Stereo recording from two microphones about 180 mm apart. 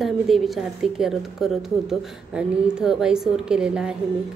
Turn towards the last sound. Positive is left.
turn(degrees=-5)  # may be behind; listen again after turning